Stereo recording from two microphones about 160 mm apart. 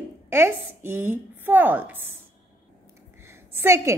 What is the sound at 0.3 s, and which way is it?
A woman's voice, 15° right (ahead or behind).